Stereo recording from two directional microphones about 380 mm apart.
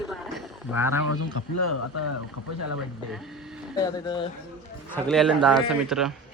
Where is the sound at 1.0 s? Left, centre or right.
Left.